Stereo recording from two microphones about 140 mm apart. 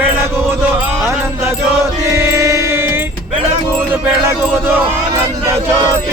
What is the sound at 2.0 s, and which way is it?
Music, 20° right (ahead or behind).